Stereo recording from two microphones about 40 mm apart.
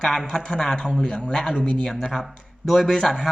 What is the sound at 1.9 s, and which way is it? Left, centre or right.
Speech, centre.